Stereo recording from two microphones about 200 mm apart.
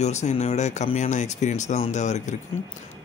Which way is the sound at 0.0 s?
35° left (ahead or behind).